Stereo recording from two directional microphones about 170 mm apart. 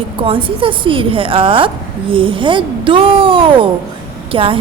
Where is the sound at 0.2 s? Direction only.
30° right (ahead or behind).